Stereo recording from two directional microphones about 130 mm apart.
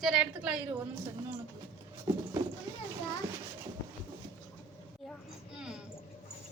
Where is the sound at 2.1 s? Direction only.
25° right (ahead or behind).